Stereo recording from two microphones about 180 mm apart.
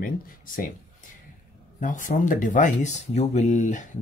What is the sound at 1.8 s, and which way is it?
Speech, 45° left (ahead or behind).